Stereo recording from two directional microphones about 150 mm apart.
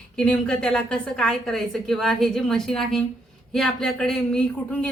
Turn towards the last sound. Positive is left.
turn(degrees=5)  # may be behind; listen again after turning